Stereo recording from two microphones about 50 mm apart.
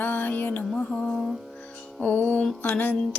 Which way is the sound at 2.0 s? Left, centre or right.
Left.